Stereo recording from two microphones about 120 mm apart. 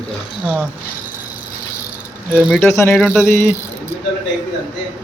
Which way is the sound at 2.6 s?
20° left (ahead or behind).